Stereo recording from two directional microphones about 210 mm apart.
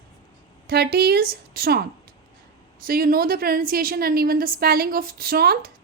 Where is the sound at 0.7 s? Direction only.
50° right (ahead or behind).